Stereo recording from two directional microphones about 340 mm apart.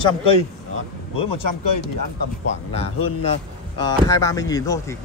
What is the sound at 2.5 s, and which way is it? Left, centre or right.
Speech, centre.